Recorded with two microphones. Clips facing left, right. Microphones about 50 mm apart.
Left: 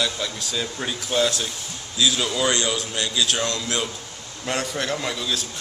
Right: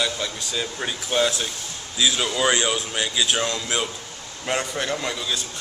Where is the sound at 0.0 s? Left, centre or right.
Centre.